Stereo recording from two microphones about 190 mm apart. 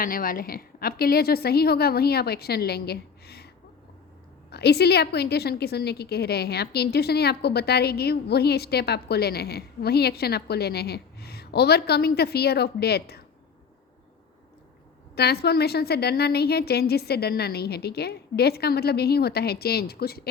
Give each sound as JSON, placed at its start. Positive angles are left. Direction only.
{"t": 0.0, "sound": "a woman's voice", "side_deg": 50}
{"t": 4.5, "sound": "a woman's voice", "side_deg": 60}
{"t": 15.1, "sound": "a woman's voice", "side_deg": 60}